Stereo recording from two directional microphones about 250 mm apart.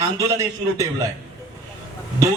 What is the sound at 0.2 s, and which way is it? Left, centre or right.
Speech, centre.